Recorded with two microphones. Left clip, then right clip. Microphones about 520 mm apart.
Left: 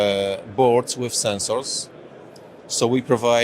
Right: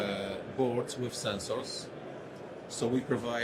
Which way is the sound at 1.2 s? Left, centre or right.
Left.